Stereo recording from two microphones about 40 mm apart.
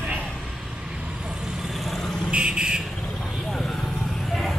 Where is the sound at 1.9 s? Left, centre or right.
Centre.